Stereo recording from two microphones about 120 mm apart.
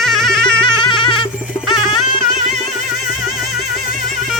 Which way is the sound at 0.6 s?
45° left (ahead or behind).